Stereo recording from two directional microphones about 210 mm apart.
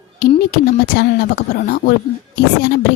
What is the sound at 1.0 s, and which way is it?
Speech, 45° left (ahead or behind).